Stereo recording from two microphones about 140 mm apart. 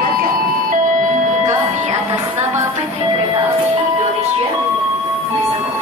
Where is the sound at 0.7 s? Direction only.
65° right (ahead or behind).